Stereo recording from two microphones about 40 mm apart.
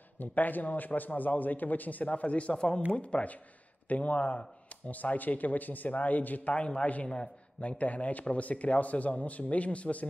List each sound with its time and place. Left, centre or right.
0.2 s a man's voice: left
6.6 s a man's voice: left